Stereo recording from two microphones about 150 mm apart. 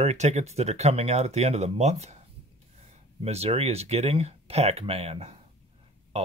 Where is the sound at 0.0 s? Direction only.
50° right (ahead or behind).